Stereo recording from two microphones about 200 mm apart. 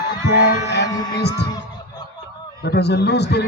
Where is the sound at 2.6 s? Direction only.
55° left (ahead or behind).